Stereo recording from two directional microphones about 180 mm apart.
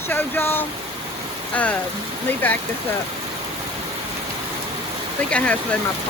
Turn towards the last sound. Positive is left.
turn(degrees=5)  # may be behind; listen again after turning